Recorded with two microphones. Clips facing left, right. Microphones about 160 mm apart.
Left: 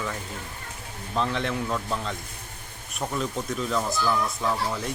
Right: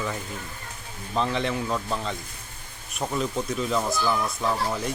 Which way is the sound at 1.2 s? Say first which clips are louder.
Right 1 dB; centre (ahead or behind).